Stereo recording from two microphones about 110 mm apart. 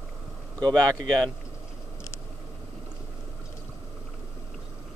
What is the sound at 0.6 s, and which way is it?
Speech, 35° right (ahead or behind).